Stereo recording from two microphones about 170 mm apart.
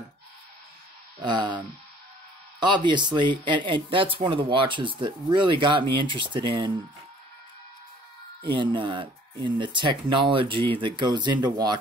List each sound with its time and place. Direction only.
1.2 s speech: 25° right (ahead or behind)
2.6 s speech: 25° right (ahead or behind)
8.5 s speech: 30° right (ahead or behind)